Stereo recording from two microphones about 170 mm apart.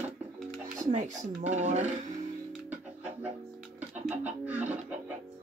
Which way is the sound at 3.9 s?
10° right (ahead or behind).